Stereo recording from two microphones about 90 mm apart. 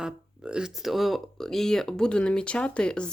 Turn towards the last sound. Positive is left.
turn(degrees=10)  # may be behind; listen again after turning